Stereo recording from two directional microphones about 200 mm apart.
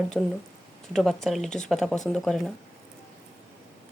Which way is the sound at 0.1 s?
5° left (ahead or behind).